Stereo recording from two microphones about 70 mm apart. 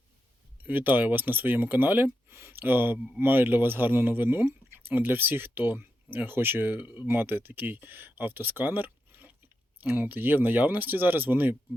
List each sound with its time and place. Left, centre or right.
0.6 s speech: right